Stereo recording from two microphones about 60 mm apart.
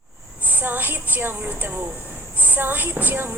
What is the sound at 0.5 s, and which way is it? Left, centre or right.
A woman's voice, right.